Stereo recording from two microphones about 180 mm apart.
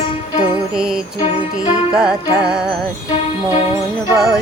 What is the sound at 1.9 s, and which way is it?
Music, 5° right (ahead or behind).